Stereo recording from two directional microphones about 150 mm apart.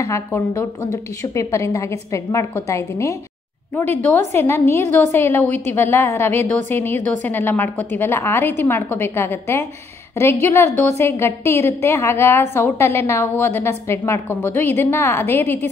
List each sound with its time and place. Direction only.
0.0 s a woman's voice: 20° left (ahead or behind)